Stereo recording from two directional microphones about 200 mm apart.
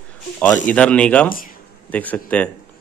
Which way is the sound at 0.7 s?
5° left (ahead or behind).